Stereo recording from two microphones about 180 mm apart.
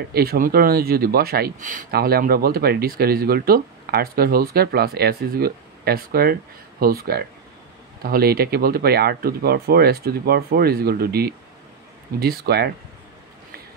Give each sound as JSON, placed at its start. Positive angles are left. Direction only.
{"t": 0.1, "sound": "speech", "side_deg": -60}